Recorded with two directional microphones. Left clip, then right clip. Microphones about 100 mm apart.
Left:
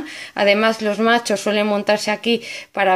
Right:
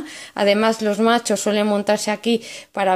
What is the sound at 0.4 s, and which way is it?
Speech, 20° right (ahead or behind).